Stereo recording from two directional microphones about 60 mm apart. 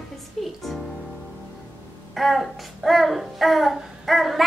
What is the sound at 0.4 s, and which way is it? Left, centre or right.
Music, centre.